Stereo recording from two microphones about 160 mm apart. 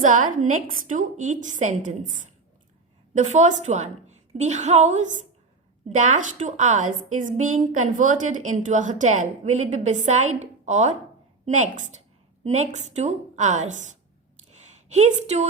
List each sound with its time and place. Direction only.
0.0 s a woman's voice: 55° right (ahead or behind)